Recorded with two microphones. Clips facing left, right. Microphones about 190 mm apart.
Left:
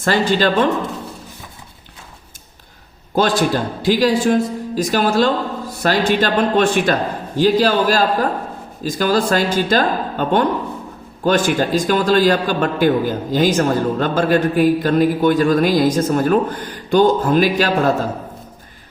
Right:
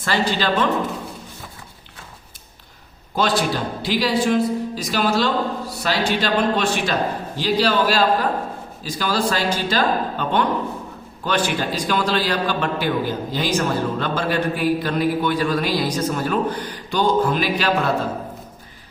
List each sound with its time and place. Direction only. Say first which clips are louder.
0.0 s a man's voice: left 5 dB; 45° left (ahead or behind)
3.2 s a man's voice: left 4 dB; 50° left (ahead or behind)